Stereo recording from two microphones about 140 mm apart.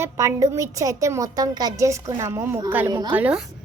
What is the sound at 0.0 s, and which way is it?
A woman's voice, 20° right (ahead or behind).